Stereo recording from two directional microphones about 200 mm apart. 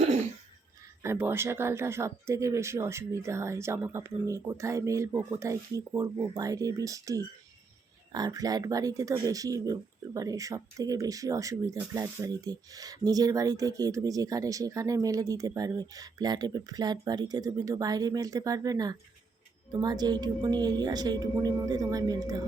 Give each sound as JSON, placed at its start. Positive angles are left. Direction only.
{"t": 1.0, "sound": "a woman's voice", "side_deg": -10}